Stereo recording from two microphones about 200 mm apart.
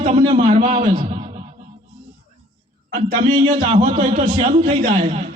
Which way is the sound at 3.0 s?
35° right (ahead or behind).